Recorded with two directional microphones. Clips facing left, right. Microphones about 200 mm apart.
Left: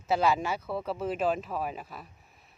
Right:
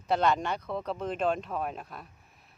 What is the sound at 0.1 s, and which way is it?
Speech, 5° left (ahead or behind).